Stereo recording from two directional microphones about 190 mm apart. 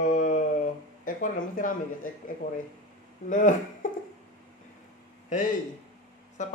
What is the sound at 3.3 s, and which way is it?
Speech, 40° left (ahead or behind).